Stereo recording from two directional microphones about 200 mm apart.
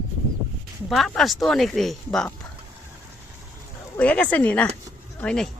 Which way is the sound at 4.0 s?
5° left (ahead or behind).